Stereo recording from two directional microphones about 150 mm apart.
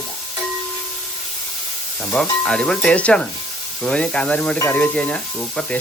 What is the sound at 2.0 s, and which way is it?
Speech, 5° left (ahead or behind).